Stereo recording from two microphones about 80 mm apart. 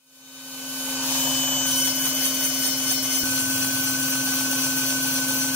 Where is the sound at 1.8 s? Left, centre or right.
Left.